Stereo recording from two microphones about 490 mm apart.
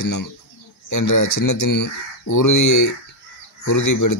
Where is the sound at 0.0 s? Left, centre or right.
Left.